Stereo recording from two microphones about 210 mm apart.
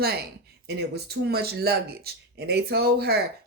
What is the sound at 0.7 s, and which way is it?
Speech, 50° right (ahead or behind).